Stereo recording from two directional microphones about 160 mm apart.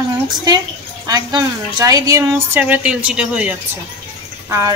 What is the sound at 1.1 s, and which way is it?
A woman's voice, 25° right (ahead or behind).